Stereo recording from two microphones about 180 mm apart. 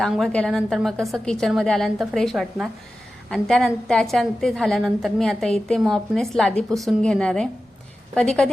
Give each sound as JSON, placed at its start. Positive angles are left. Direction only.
{"t": 0.0, "sound": "a woman's voice", "side_deg": 5}